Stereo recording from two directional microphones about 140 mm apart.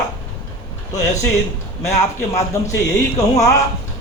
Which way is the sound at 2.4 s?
20° left (ahead or behind).